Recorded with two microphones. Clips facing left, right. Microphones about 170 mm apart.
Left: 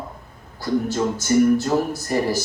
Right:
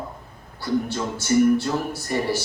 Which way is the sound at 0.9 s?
40° left (ahead or behind).